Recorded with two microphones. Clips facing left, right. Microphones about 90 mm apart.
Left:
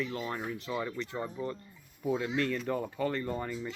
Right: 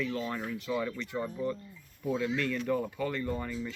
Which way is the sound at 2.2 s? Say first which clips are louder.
Right 3 dB; 30° left (ahead or behind).